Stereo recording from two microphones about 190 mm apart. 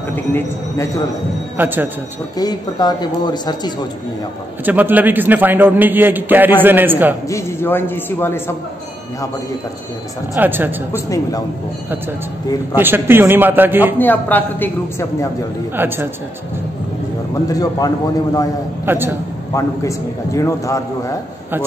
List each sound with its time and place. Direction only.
0.1 s a man's voice: 10° left (ahead or behind)
1.6 s a man's voice: 10° right (ahead or behind)
2.3 s speech: 20° left (ahead or behind)
4.6 s a man's voice: 10° right (ahead or behind)
7.2 s a man's voice: 15° left (ahead or behind)
10.3 s a man's voice: 10° right (ahead or behind)
10.9 s a man's voice: 15° left (ahead or behind)
12.7 s a man's voice: 10° right (ahead or behind)
13.9 s a man's voice: 10° left (ahead or behind)
15.7 s a man's voice: 10° right (ahead or behind)
17.5 s speech: 20° left (ahead or behind)
18.9 s a man's voice: 10° right (ahead or behind)
19.5 s a man's voice: 15° left (ahead or behind)